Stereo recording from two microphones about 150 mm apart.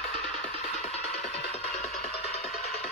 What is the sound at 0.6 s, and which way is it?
Music, 45° left (ahead or behind).